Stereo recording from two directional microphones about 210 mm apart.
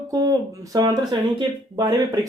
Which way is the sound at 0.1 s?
15° right (ahead or behind).